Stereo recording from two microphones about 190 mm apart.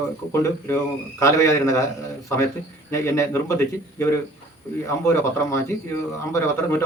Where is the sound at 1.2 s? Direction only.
15° left (ahead or behind).